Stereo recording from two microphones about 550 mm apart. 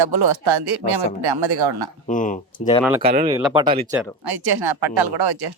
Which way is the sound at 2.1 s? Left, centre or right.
Centre.